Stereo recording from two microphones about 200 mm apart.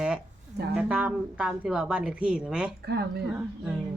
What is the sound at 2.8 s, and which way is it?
Speech, 55° right (ahead or behind).